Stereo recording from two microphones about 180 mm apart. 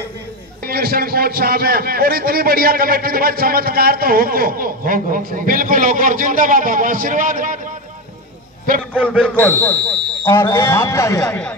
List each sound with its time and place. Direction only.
0.7 s a man's voice: 55° right (ahead or behind)
8.9 s a man's voice: 10° right (ahead or behind)
9.2 s speech: 5° left (ahead or behind)